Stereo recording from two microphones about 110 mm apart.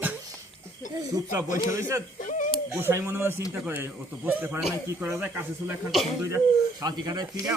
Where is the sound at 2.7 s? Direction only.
20° right (ahead or behind).